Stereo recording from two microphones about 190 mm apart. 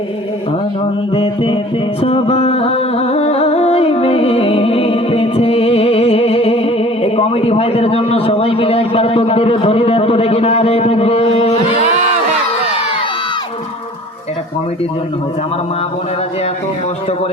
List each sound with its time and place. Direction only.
1.1 s music: 30° left (ahead or behind)